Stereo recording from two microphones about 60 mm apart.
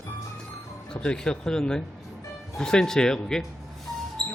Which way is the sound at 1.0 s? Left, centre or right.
Centre.